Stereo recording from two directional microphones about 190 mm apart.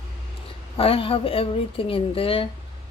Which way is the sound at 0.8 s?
30° left (ahead or behind).